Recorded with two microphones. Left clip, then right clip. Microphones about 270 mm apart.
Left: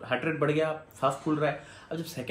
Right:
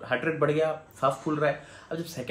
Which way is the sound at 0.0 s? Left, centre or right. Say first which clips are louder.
Right 2 dB; centre.